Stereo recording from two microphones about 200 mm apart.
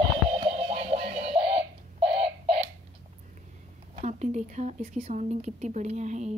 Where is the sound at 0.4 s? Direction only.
30° right (ahead or behind).